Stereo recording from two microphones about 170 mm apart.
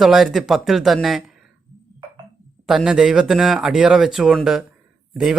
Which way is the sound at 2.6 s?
5° right (ahead or behind).